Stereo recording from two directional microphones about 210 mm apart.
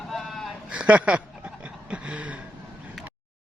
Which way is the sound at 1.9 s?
5° right (ahead or behind).